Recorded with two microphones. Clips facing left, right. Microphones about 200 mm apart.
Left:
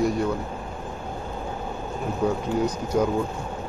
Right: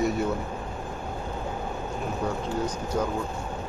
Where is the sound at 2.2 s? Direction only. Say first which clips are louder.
Left 7 dB; 10° left (ahead or behind).